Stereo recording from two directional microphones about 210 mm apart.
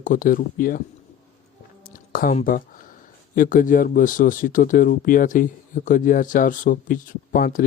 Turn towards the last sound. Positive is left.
turn(degrees=40)  # may be behind; listen again after turning